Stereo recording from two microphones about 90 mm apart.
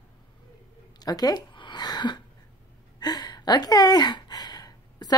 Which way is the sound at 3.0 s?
50° left (ahead or behind).